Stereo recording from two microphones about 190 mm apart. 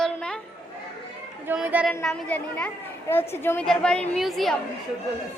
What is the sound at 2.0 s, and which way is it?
A woman's voice, 5° left (ahead or behind).